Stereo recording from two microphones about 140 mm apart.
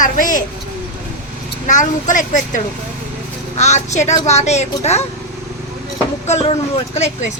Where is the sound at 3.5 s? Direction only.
55° left (ahead or behind).